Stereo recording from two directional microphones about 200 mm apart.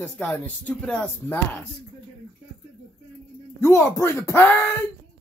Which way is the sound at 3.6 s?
15° left (ahead or behind).